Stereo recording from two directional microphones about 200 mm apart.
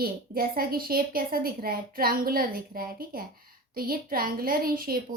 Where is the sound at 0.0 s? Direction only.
50° right (ahead or behind).